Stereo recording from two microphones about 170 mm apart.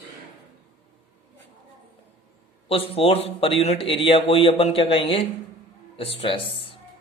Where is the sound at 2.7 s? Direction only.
35° left (ahead or behind).